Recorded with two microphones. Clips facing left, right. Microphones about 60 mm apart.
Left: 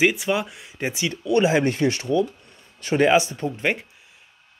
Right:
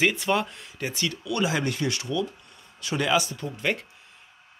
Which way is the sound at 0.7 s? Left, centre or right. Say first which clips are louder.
Left 4 dB; left.